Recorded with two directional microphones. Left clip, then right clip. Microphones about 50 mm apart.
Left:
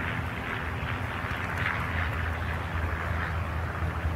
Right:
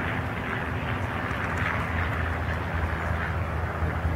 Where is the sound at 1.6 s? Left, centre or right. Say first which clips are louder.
Right 2 dB; left.